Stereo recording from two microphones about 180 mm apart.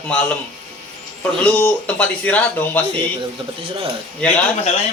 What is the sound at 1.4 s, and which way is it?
A man's voice, 10° left (ahead or behind).